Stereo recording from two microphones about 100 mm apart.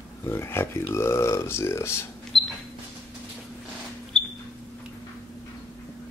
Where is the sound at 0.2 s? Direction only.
25° left (ahead or behind).